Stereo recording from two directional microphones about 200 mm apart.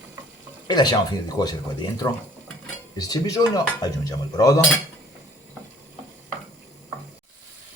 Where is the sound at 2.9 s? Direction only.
20° left (ahead or behind).